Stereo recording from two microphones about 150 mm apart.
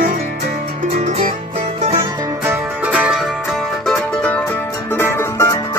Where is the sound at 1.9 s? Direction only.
25° right (ahead or behind).